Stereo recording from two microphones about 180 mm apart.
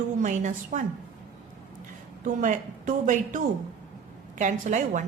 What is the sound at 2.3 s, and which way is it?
A woman's voice, 45° right (ahead or behind).